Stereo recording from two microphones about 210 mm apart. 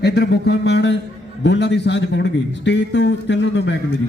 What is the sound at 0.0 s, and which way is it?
Speech, 50° left (ahead or behind).